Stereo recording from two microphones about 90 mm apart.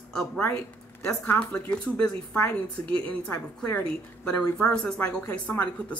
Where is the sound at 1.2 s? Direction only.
20° left (ahead or behind).